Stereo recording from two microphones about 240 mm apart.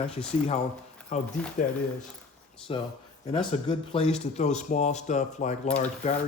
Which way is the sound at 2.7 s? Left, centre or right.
Left.